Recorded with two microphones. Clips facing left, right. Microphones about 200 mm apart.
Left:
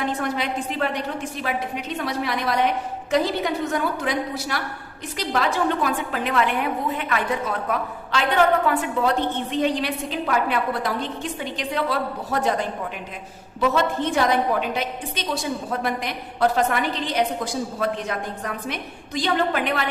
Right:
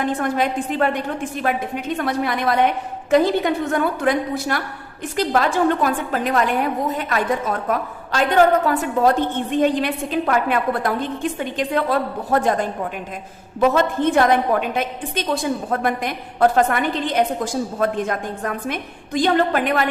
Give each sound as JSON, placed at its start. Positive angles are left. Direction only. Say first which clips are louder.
{"t": 0.0, "sound": "a woman's voice", "louder": "right 5 dB", "side_deg": -50}